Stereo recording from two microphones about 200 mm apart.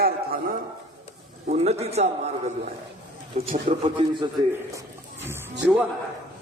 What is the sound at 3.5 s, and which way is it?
Speech, 30° right (ahead or behind).